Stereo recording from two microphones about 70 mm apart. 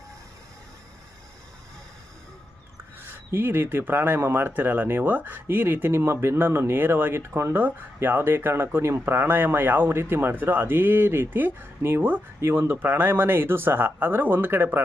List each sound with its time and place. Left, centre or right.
3.1 s speech: right
12.7 s speech: right